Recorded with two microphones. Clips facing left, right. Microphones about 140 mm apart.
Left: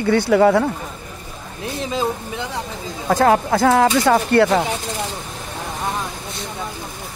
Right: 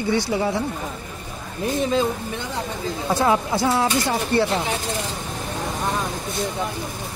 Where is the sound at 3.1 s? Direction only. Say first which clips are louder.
Left 5 dB; 50° left (ahead or behind).